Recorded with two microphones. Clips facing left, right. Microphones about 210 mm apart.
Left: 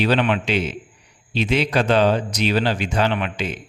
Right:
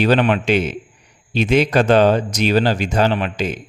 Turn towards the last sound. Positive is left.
turn(degrees=-40)  # may be behind; listen again after turning